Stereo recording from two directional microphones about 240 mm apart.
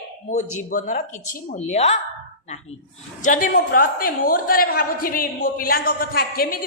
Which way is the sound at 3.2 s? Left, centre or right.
Left.